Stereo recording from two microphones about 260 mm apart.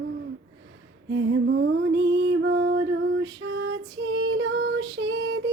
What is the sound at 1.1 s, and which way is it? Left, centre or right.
Music, right.